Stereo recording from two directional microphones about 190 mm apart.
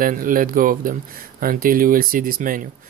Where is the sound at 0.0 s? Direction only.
45° right (ahead or behind).